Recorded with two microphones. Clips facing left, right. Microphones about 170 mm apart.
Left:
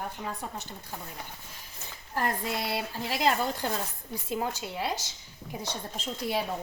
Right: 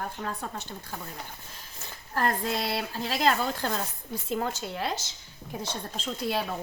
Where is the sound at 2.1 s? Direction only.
10° left (ahead or behind).